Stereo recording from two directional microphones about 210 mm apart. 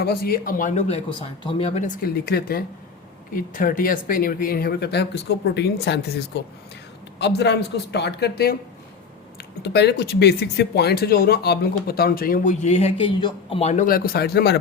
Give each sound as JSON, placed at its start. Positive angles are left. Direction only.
{"t": 0.0, "sound": "speech", "side_deg": 45}
{"t": 2.0, "sound": "speech", "side_deg": 45}
{"t": 9.6, "sound": "speech", "side_deg": 55}